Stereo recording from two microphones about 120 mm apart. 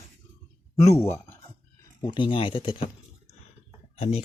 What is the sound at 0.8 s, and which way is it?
Speech, 20° left (ahead or behind).